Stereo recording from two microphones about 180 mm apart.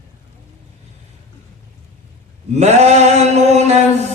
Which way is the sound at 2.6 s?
35° right (ahead or behind).